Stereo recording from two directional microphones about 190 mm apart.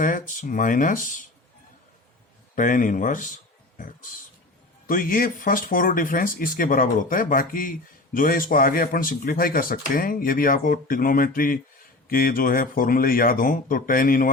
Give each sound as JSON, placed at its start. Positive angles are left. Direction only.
{"t": 0.0, "sound": "speech", "side_deg": 45}
{"t": 2.6, "sound": "speech", "side_deg": 45}